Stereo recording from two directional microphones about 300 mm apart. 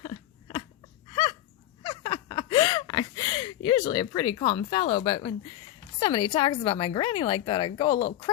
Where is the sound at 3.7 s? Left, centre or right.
Centre.